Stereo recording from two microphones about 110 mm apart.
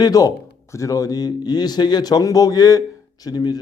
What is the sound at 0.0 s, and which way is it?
Speech, 35° left (ahead or behind).